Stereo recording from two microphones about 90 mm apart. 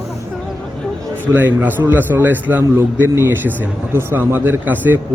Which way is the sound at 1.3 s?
20° right (ahead or behind).